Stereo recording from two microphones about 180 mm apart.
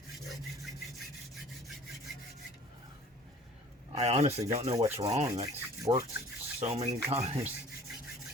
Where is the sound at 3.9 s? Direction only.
35° right (ahead or behind).